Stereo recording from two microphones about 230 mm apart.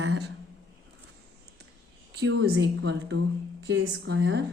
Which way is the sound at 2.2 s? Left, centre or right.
Right.